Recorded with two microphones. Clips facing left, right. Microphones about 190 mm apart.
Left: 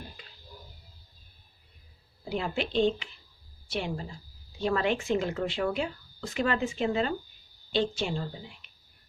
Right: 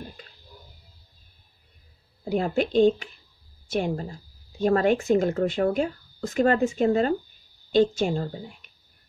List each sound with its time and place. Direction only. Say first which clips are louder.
2.2 s a woman's voice: right 7 dB; 45° right (ahead or behind)